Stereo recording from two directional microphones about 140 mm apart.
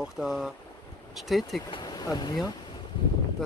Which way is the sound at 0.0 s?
Centre (ahead or behind).